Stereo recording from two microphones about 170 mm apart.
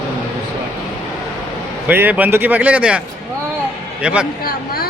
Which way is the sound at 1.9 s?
10° right (ahead or behind).